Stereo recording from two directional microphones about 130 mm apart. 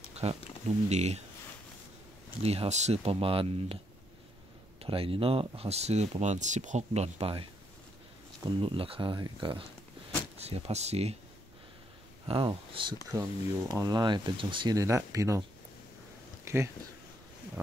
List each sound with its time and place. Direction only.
0.2 s speech: 55° right (ahead or behind)
2.4 s speech: 50° right (ahead or behind)
4.8 s speech: 45° right (ahead or behind)
8.5 s speech: 40° right (ahead or behind)
10.4 s speech: 55° right (ahead or behind)
12.3 s speech: 40° right (ahead or behind)
13.1 s speech: 25° right (ahead or behind)
14.8 s speech: 25° right (ahead or behind)
16.4 s speech: 20° right (ahead or behind)